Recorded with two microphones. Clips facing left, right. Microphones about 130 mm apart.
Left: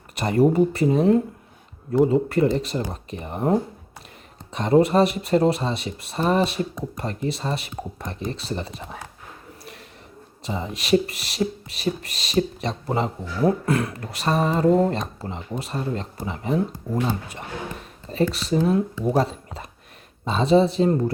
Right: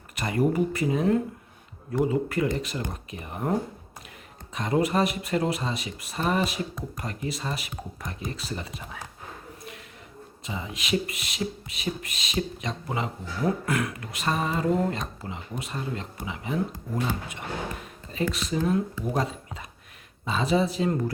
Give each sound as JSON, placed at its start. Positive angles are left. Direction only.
{"t": 0.2, "sound": "speech", "side_deg": 30}
{"t": 10.4, "sound": "speech", "side_deg": 40}